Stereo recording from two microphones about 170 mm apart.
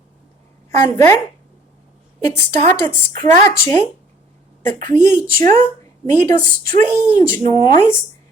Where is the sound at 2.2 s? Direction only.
15° left (ahead or behind).